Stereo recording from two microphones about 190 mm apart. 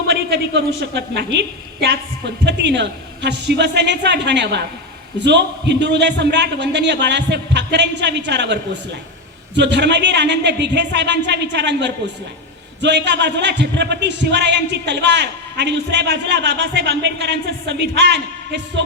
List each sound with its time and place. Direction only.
0.1 s a woman's voice: 65° right (ahead or behind)